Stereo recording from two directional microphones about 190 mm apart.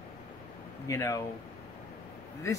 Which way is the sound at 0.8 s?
15° left (ahead or behind).